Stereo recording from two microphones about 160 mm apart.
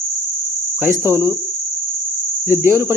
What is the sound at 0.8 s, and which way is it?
Cricket, 15° right (ahead or behind).